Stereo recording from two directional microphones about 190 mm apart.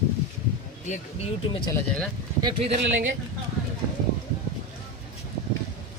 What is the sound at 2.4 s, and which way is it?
Speech, 25° right (ahead or behind).